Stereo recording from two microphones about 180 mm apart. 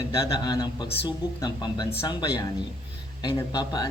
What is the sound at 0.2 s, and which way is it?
Speech, 20° left (ahead or behind).